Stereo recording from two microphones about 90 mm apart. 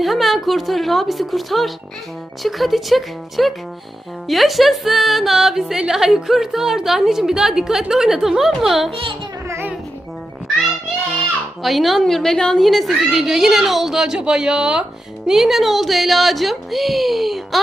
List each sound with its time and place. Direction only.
0.0 s speech: centre (ahead or behind)
11.6 s speech: centre (ahead or behind)